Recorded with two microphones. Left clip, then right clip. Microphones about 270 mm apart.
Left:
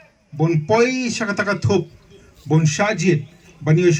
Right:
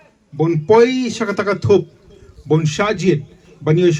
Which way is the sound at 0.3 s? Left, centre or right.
Centre.